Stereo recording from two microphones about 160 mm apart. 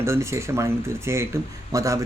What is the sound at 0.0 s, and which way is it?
Speech, 15° right (ahead or behind).